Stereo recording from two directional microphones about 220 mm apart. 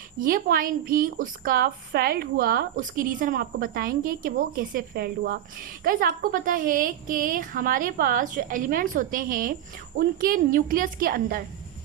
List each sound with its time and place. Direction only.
0.2 s speech: 40° right (ahead or behind)